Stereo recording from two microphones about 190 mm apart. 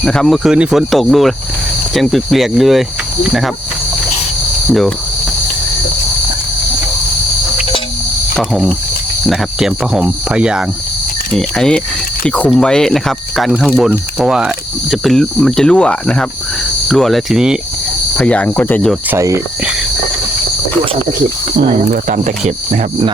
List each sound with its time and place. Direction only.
0.0 s cricket: 5° left (ahead or behind)
8.4 s cricket: centre (ahead or behind)
18.2 s speech: 5° left (ahead or behind)
19.1 s cricket: 15° right (ahead or behind)
21.7 s speech: 40° right (ahead or behind)